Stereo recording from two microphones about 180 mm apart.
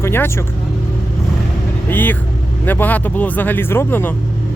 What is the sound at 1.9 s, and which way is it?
Speech, 10° left (ahead or behind).